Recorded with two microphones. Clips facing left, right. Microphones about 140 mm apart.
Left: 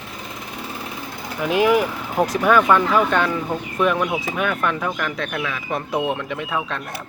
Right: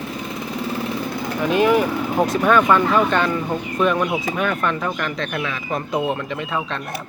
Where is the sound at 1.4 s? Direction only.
10° left (ahead or behind).